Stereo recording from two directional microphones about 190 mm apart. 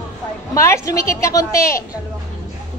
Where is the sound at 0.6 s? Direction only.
15° left (ahead or behind).